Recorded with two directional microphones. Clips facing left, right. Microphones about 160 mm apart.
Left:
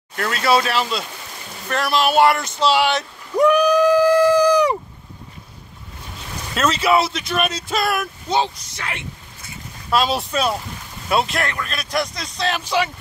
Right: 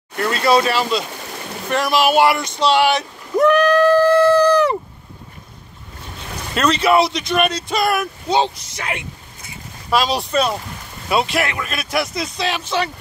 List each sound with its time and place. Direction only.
0.2 s speech: centre (ahead or behind)
3.3 s a sound: 10° left (ahead or behind)
6.5 s speech: 5° left (ahead or behind)
8.3 s speech: 20° right (ahead or behind)
9.8 s speech: centre (ahead or behind)